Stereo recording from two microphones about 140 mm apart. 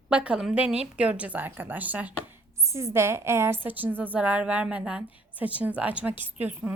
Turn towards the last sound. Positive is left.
turn(degrees=-10)  # may be behind; listen again after turning